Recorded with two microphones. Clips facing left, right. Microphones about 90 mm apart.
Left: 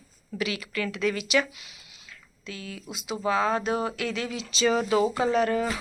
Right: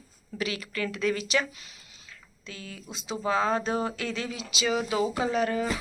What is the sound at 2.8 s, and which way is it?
Speech, 10° left (ahead or behind).